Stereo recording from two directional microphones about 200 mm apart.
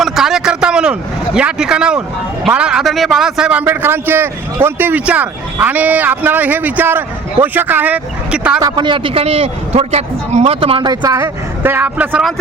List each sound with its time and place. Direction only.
0.0 s a man's voice: centre (ahead or behind)
8.6 s a man's voice: 20° right (ahead or behind)